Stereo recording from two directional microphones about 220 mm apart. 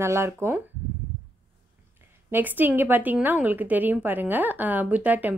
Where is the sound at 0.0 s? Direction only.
10° right (ahead or behind).